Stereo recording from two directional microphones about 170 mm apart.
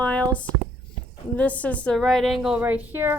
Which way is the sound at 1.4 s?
10° left (ahead or behind).